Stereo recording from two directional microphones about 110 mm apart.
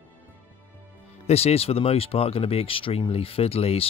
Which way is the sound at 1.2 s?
70° left (ahead or behind).